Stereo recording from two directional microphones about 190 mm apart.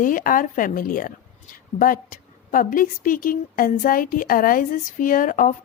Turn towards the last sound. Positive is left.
turn(degrees=45)  # may be behind; listen again after turning